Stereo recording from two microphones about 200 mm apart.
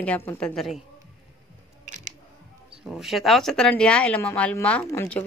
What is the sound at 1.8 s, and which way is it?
Scissors, 35° right (ahead or behind).